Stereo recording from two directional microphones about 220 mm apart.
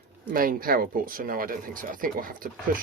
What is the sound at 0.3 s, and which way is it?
Speech, 40° right (ahead or behind).